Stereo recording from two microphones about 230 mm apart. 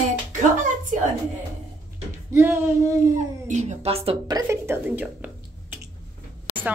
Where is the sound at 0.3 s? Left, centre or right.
Right.